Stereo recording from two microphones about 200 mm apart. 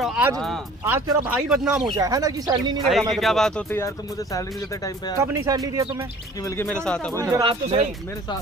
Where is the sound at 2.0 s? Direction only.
15° right (ahead or behind).